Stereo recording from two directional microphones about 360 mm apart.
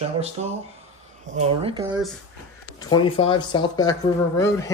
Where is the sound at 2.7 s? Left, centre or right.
Centre.